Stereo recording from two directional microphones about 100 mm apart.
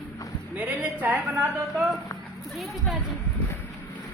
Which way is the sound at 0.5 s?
15° right (ahead or behind).